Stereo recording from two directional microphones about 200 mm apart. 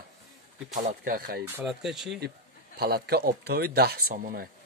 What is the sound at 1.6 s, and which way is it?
Speech, centre (ahead or behind).